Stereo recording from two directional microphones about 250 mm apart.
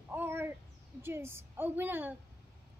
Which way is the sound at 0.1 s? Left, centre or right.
Centre.